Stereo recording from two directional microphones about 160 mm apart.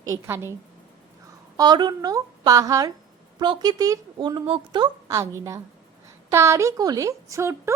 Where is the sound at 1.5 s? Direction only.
25° right (ahead or behind).